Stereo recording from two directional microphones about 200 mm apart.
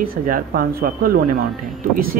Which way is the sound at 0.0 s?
45° right (ahead or behind).